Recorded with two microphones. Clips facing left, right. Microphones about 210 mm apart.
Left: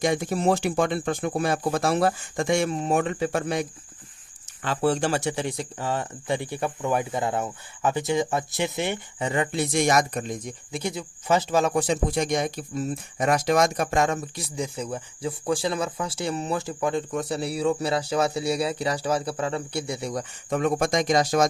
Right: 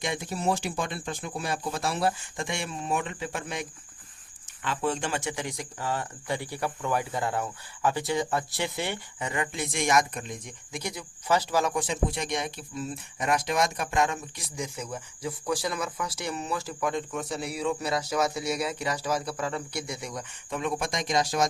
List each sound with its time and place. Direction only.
0.0 s speech: 45° left (ahead or behind)
0.4 s speech: 60° left (ahead or behind)